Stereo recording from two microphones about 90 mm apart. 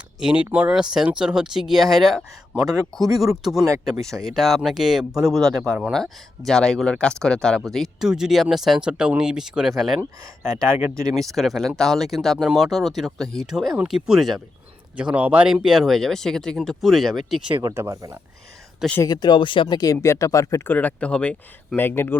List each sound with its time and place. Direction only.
0.2 s speech: 10° right (ahead or behind)
10.7 s speech: 20° right (ahead or behind)
11.1 s speech: centre (ahead or behind)
14.9 s speech: 15° right (ahead or behind)
17.7 s speech: 40° right (ahead or behind)
19.0 s speech: 50° left (ahead or behind); by 19.6 s 70° left (ahead or behind)
19.6 s speech: 45° left (ahead or behind)
20.7 s speech: 15° left (ahead or behind)
21.8 s speech: 25° left (ahead or behind)